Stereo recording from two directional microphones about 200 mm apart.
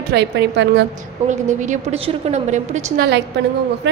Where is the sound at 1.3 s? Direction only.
35° right (ahead or behind).